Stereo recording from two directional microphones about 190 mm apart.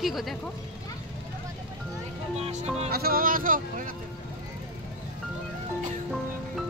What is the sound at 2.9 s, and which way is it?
Speech, 50° right (ahead or behind).